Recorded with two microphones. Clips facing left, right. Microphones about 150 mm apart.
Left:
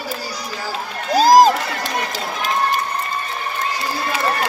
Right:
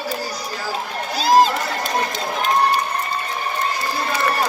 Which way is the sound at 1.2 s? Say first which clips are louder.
Left 4 dB; 40° left (ahead or behind).